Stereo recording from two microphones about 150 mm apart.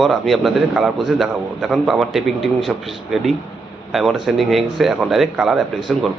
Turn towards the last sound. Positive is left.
turn(degrees=0)  # may be behind; listen again after turning